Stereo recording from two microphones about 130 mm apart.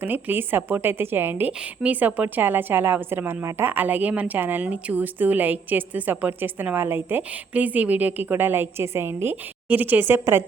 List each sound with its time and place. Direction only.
0.0 s a woman's voice: 15° right (ahead or behind)